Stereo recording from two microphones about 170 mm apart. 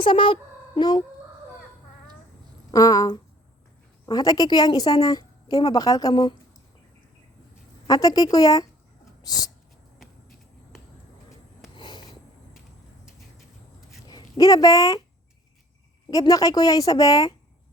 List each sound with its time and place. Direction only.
0.0 s a woman's voice: 30° left (ahead or behind)
2.7 s a woman's voice: 20° left (ahead or behind)
7.9 s a woman's voice: 20° left (ahead or behind)
11.8 s a sound: 25° left (ahead or behind)
14.1 s speech: 20° left (ahead or behind)
16.0 s a woman's voice: 20° left (ahead or behind)